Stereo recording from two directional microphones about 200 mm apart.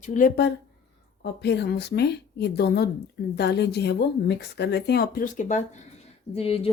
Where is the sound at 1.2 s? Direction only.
55° left (ahead or behind).